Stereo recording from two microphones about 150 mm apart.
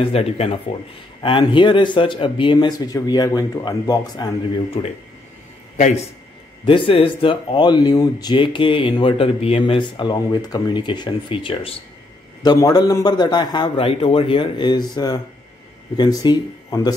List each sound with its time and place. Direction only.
0.0 s speech: 40° left (ahead or behind)
4.8 s speech: 45° left (ahead or behind)
6.6 s speech: 35° left (ahead or behind)
12.4 s a man's voice: 25° left (ahead or behind)